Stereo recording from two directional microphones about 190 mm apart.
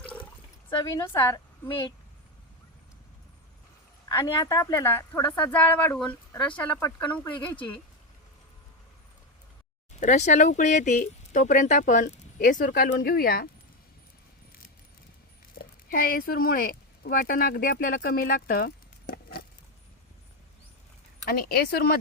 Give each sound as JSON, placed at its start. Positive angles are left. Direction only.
{"t": 0.0, "sound": "water", "side_deg": 5}
{"t": 0.7, "sound": "a woman's voice", "side_deg": 25}
{"t": 4.1, "sound": "speech", "side_deg": 15}
{"t": 7.3, "sound": "speech", "side_deg": 25}
{"t": 10.0, "sound": "speech", "side_deg": 40}
{"t": 15.6, "sound": "a sound", "side_deg": 55}
{"t": 15.9, "sound": "speech", "side_deg": 50}
{"t": 21.2, "sound": "speech", "side_deg": 55}